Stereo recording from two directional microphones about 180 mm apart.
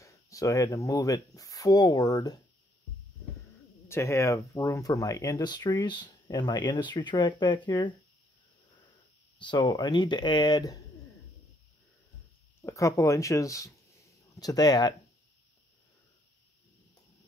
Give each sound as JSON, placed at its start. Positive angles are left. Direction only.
{"t": 0.0, "sound": "speech", "side_deg": 20}
{"t": 3.9, "sound": "speech", "side_deg": 15}
{"t": 9.4, "sound": "speech", "side_deg": 25}
{"t": 12.6, "sound": "speech", "side_deg": 15}